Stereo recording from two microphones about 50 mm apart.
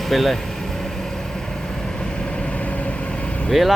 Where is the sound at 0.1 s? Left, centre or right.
Centre.